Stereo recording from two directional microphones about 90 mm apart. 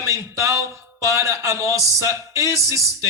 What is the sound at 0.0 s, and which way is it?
Speech, 35° right (ahead or behind).